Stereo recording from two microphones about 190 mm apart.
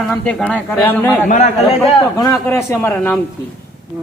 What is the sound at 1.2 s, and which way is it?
Speech, 40° left (ahead or behind).